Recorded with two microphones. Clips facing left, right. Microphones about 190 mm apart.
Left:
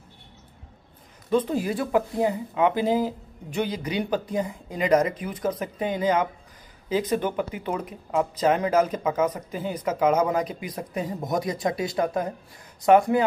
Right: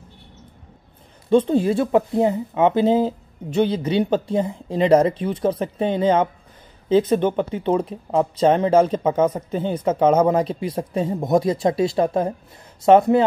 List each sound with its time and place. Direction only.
1.3 s speech: 30° right (ahead or behind)